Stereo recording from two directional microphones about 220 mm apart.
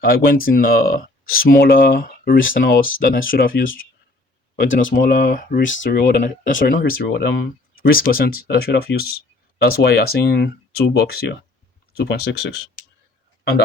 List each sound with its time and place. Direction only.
0.0 s speech: 45° left (ahead or behind)